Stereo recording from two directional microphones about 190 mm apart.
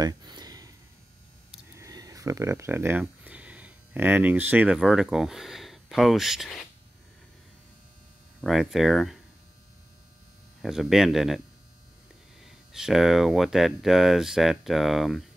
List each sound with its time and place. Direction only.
0.0 s a sound: 20° right (ahead or behind)
1.5 s speech: 15° right (ahead or behind)
8.4 s speech: centre (ahead or behind)
10.6 s speech: centre (ahead or behind)